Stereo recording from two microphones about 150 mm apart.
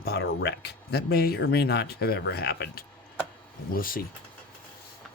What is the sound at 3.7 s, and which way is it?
Speech, 70° left (ahead or behind).